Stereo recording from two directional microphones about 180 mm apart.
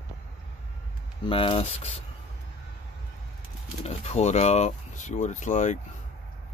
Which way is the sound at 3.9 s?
40° left (ahead or behind).